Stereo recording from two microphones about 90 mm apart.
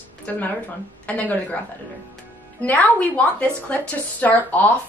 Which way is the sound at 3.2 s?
15° left (ahead or behind).